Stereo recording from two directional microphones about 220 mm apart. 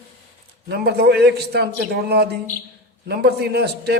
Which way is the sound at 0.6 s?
50° right (ahead or behind).